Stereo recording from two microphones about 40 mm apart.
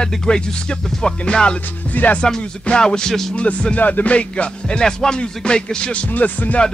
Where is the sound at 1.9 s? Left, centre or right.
Left.